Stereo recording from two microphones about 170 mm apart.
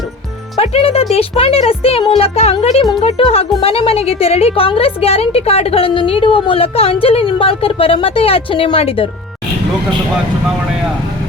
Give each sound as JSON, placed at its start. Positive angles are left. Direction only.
{"t": 0.6, "sound": "a woman's voice", "side_deg": 35}